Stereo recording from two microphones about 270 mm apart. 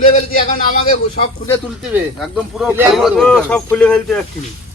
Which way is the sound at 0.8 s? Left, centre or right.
Left.